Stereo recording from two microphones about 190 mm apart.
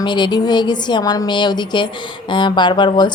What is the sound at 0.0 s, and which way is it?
Speech, 25° left (ahead or behind).